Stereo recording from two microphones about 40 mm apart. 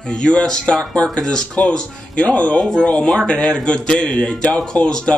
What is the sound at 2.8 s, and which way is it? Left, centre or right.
Speech, left.